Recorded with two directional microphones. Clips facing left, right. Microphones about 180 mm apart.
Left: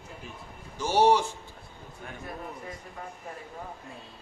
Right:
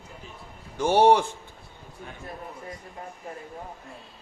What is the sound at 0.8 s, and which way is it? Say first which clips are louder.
Speech: right 4 dB; 55° right (ahead or behind).